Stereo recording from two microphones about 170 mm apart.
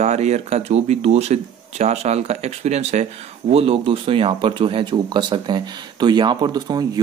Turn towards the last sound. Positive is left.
turn(degrees=-25)  # may be behind; listen again after turning